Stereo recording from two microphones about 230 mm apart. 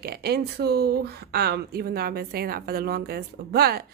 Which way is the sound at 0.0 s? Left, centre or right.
Right.